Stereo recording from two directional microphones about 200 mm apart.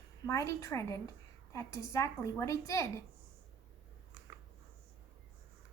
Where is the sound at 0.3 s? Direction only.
15° left (ahead or behind).